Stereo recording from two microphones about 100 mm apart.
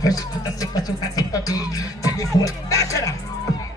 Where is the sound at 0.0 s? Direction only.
40° left (ahead or behind).